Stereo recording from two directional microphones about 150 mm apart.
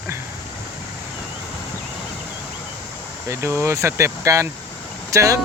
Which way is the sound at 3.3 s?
20° right (ahead or behind).